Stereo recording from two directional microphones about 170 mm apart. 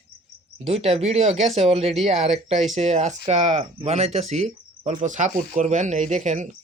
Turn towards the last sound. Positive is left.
turn(degrees=-45)  # may be behind; listen again after turning